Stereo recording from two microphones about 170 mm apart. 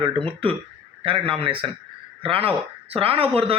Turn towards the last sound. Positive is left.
turn(degrees=-35)  # may be behind; listen again after turning